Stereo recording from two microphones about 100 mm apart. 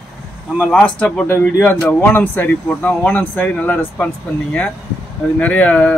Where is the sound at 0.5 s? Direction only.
10° left (ahead or behind).